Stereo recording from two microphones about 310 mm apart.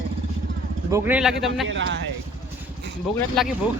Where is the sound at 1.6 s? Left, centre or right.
Right.